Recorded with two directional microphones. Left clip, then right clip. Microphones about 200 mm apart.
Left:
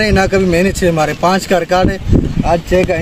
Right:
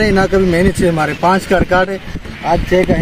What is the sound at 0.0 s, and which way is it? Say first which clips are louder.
Speech: even; 20° left (ahead or behind).